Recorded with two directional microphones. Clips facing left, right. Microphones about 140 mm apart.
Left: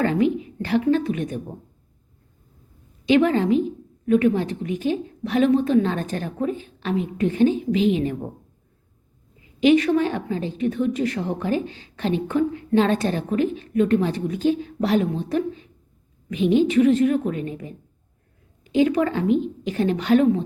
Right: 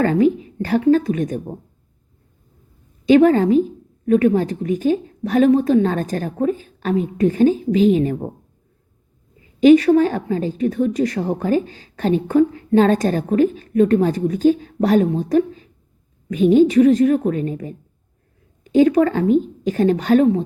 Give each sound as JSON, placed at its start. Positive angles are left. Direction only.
{"t": 0.0, "sound": "a woman's voice", "side_deg": -40}
{"t": 3.1, "sound": "a woman's voice", "side_deg": -40}
{"t": 9.6, "sound": "a woman's voice", "side_deg": -40}